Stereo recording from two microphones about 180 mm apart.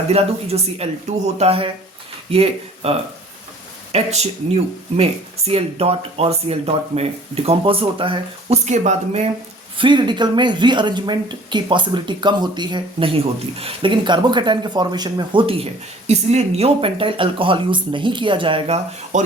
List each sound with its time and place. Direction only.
0.1 s speech: 35° right (ahead or behind)
5.5 s speech: 30° right (ahead or behind)
9.7 s speech: 25° right (ahead or behind)
19.1 s speech: 40° right (ahead or behind)